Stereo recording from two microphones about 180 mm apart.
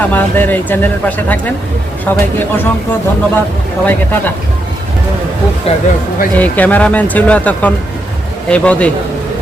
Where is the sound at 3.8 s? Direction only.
10° left (ahead or behind).